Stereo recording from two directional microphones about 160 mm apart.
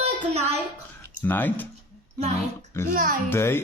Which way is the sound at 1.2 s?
10° left (ahead or behind).